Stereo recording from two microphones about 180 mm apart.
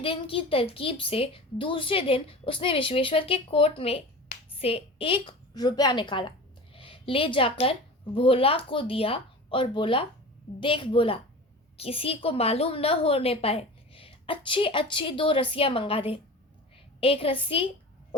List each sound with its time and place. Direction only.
0.0 s a woman's voice: 30° left (ahead or behind)